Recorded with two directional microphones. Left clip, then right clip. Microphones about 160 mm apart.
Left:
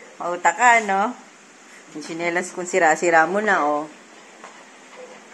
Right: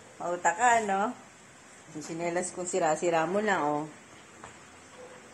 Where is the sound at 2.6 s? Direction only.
15° left (ahead or behind).